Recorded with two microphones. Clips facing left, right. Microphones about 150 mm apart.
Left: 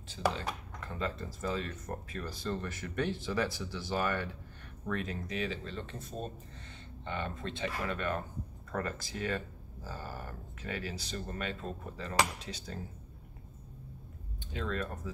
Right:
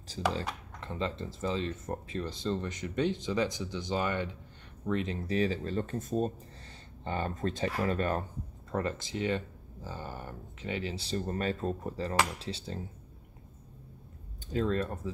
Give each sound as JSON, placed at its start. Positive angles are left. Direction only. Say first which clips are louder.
{"t": 0.1, "sound": "speech", "louder": "right 1 dB", "side_deg": -35}
{"t": 8.7, "sound": "speech", "louder": "right 4 dB", "side_deg": -25}
{"t": 14.5, "sound": "speech", "louder": "right 6 dB", "side_deg": -35}